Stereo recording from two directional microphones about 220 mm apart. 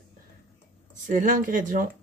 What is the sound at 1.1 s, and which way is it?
Speech, 40° right (ahead or behind).